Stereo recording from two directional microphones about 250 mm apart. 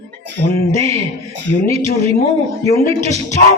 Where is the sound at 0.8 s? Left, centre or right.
Right.